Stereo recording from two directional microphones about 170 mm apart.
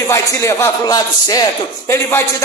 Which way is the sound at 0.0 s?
20° left (ahead or behind).